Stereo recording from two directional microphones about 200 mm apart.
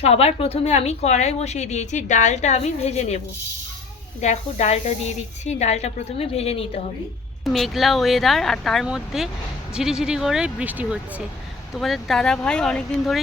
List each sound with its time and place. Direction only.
0.0 s speech: 30° left (ahead or behind)
4.2 s speech: 35° left (ahead or behind)
7.4 s speech: centre (ahead or behind)